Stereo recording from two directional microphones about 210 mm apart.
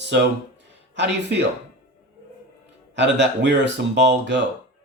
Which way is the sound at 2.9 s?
55° right (ahead or behind).